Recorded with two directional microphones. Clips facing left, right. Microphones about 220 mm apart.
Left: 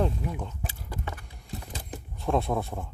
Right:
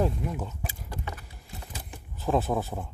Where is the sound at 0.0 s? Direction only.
5° right (ahead or behind).